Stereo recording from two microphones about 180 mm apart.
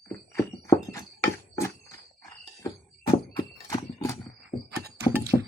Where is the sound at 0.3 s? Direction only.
15° left (ahead or behind).